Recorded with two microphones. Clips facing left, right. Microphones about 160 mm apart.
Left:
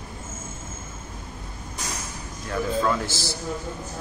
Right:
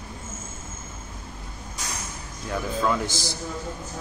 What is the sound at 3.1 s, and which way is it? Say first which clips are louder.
Speech: left 1 dB; 15° right (ahead or behind).